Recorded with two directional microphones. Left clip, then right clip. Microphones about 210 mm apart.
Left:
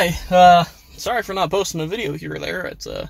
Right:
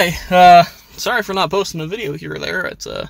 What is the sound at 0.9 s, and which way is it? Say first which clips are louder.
Speech: right 4 dB; 20° right (ahead or behind).